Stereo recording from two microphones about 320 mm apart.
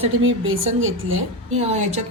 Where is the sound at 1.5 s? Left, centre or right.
Centre.